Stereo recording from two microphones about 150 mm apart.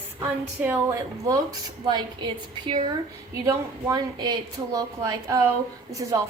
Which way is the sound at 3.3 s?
20° right (ahead or behind).